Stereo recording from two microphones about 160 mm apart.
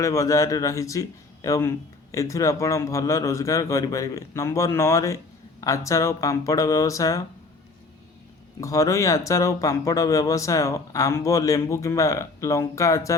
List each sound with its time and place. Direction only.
0.0 s speech: 20° left (ahead or behind)
8.6 s speech: 20° left (ahead or behind)